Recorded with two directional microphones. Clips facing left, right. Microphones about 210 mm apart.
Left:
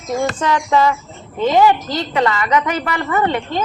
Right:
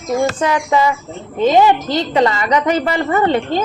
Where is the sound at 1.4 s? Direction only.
20° right (ahead or behind).